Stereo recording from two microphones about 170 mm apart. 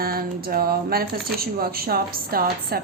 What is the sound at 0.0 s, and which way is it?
A woman's voice, 60° right (ahead or behind).